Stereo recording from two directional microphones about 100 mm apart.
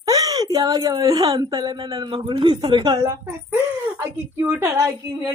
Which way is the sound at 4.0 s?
20° right (ahead or behind).